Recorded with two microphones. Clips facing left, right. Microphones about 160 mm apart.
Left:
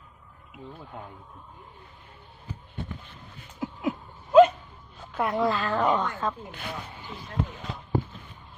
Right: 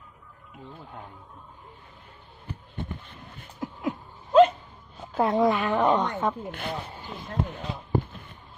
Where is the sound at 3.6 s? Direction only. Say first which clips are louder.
Left 1 dB; 10° left (ahead or behind).